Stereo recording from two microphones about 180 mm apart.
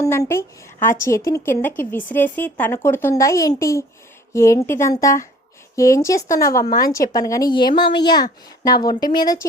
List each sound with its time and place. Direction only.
0.0 s a woman's voice: 15° left (ahead or behind)